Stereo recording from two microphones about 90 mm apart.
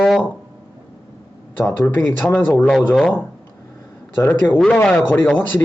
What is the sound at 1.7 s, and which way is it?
Speech, 25° left (ahead or behind).